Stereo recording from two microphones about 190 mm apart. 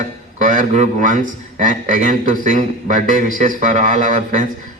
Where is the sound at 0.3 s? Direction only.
40° right (ahead or behind).